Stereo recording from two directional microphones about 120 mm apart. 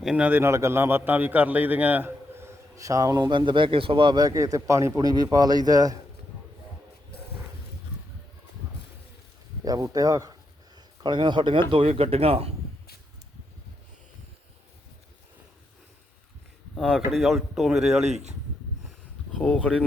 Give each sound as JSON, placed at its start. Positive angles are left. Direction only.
{"t": 0.0, "sound": "a man's voice", "side_deg": -10}
{"t": 9.6, "sound": "a man's voice", "side_deg": -30}
{"t": 16.7, "sound": "speech", "side_deg": 5}
{"t": 19.4, "sound": "speech", "side_deg": 10}